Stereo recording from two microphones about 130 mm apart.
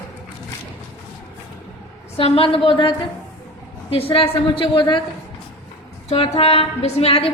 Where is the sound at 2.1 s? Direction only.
45° left (ahead or behind).